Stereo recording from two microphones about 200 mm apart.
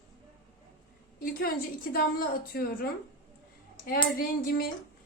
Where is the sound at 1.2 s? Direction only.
45° left (ahead or behind).